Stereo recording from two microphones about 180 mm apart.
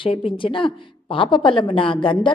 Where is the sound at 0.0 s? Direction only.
30° left (ahead or behind).